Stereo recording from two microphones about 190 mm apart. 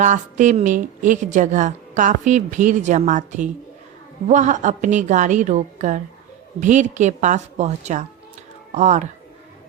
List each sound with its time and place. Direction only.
0.0 s a woman's voice: 40° right (ahead or behind)